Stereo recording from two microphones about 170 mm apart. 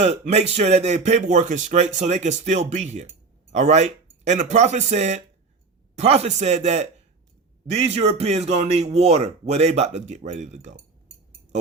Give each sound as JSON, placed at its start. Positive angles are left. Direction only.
{"t": 0.0, "sound": "speech", "side_deg": -40}